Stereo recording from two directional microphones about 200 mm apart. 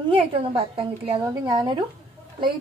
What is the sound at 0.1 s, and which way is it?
A woman's voice, 25° right (ahead or behind).